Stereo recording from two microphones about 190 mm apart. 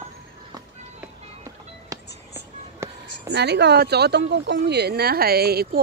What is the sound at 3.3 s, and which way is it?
Speech, 60° right (ahead or behind).